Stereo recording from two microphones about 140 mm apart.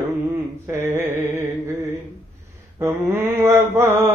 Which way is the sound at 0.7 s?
15° right (ahead or behind).